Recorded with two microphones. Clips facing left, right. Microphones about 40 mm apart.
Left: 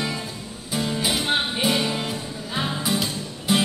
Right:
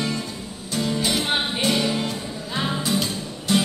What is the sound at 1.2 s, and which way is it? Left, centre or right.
Music, centre.